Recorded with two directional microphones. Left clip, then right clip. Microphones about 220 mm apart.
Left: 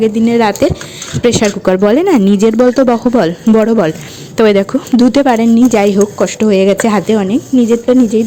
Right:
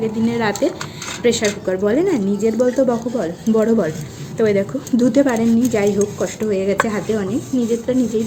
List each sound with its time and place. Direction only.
0.0 s speech: 35° left (ahead or behind)
7.5 s speech: 25° left (ahead or behind)